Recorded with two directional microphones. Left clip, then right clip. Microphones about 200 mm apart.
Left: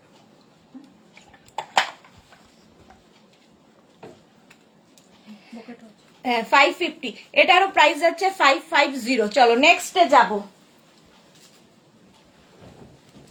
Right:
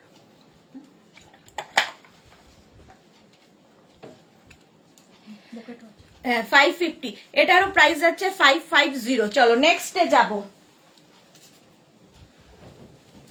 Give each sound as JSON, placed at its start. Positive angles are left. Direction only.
{"t": 6.2, "sound": "a woman's voice", "side_deg": -20}